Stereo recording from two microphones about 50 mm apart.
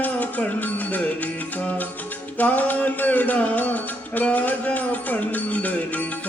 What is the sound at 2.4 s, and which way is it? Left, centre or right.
Music, left.